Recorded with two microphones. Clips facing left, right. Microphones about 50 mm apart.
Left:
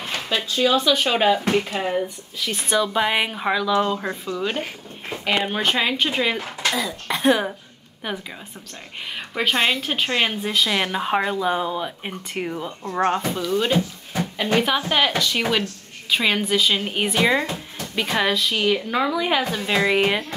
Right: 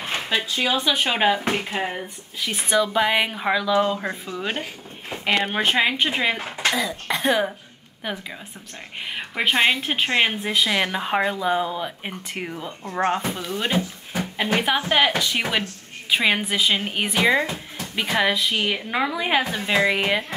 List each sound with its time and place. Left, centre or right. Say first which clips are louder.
0.0 s a sound: right 1 dB; right
0.7 s speech: left 4 dB; centre
2.7 s speech: right 1 dB; centre
4.0 s a woman's voice: left 2 dB; centre
7.1 s speech: left 3 dB; centre
9.1 s speech: even; centre
13.0 s speech: left 2 dB; centre
16.9 s speech: even; centre